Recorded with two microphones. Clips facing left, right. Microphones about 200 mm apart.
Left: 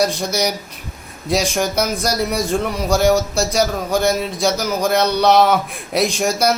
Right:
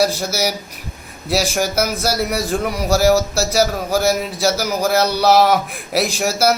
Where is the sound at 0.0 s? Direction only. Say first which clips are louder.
Even; 5° right (ahead or behind).